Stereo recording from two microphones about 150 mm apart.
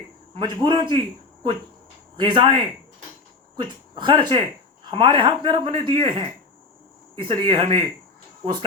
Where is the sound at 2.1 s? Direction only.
30° right (ahead or behind).